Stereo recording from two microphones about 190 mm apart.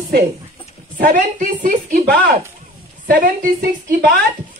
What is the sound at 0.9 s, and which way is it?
A woman's voice, 45° right (ahead or behind).